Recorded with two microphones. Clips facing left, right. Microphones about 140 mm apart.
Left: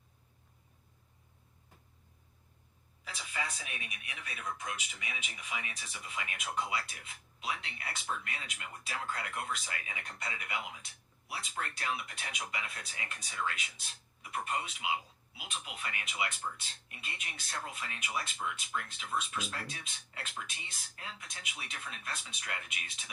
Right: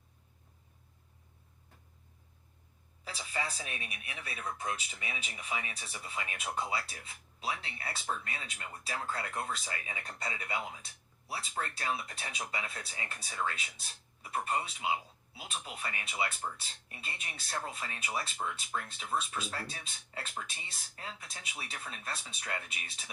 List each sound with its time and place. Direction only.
3.0 s speech: 30° right (ahead or behind)